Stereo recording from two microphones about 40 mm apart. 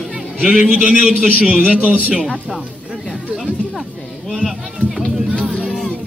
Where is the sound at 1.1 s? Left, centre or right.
Right.